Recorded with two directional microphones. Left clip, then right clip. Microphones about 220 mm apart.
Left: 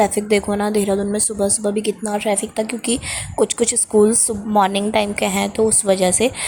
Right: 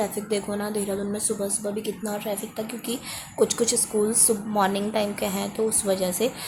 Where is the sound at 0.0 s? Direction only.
25° left (ahead or behind).